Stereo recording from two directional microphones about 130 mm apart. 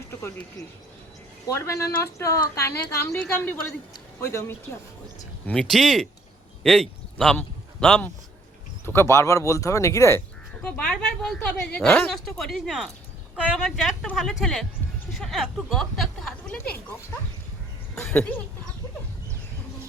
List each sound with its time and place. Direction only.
0.1 s speech: 15° left (ahead or behind)
1.5 s a woman's voice: 25° left (ahead or behind)
5.5 s a woman's voice: 5° left (ahead or behind)
8.9 s speech: 20° left (ahead or behind)
10.6 s a woman's voice: 10° left (ahead or behind)
17.9 s speech: 5° left (ahead or behind)